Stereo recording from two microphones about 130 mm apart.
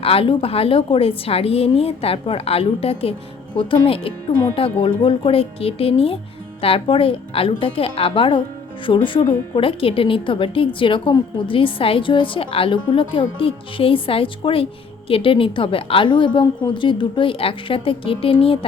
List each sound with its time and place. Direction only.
0.0 s a woman's voice: 45° left (ahead or behind)